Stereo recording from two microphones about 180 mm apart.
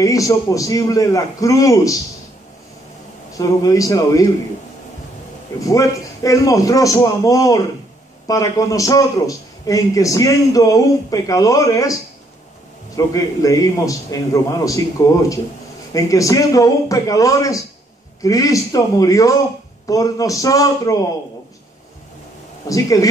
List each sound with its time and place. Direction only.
0.0 s a man's voice: 20° left (ahead or behind)
3.3 s a man's voice: 20° left (ahead or behind)
5.6 s a man's voice: 20° left (ahead or behind)
22.7 s a man's voice: 20° left (ahead or behind)